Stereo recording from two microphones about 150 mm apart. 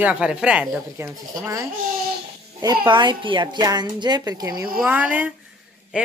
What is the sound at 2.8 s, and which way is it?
Speech, 30° right (ahead or behind).